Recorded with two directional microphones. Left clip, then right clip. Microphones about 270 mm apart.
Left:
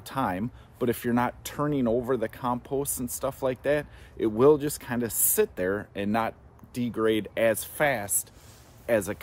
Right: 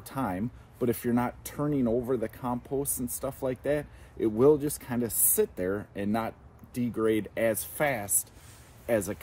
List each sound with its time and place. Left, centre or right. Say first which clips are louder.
0.0 s speech: left 4 dB; centre